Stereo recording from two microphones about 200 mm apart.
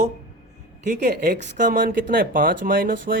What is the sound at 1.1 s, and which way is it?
Speech, 45° right (ahead or behind).